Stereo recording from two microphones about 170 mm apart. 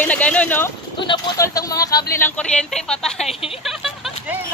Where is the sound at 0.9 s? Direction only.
30° left (ahead or behind); by 4.4 s centre (ahead or behind).